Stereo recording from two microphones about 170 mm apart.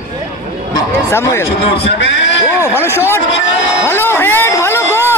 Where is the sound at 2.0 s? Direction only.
90° left.